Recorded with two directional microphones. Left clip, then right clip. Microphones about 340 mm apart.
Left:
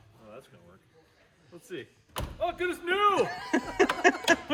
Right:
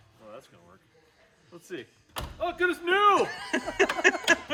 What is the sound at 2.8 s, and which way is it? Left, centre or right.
Speech, centre.